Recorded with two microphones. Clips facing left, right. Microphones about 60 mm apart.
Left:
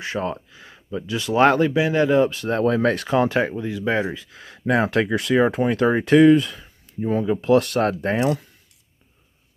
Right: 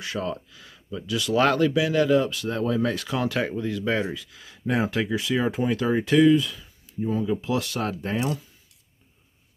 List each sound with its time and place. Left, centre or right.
0.0 s speech: left
2.6 s speech: left
3.1 s speech: left
3.5 s speech: centre
3.9 s speech: left
4.4 s speech: left
8.2 s speech: left